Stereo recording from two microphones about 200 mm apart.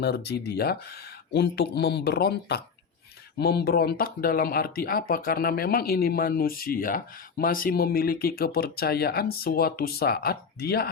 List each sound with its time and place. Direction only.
0.0 s speech: 55° left (ahead or behind)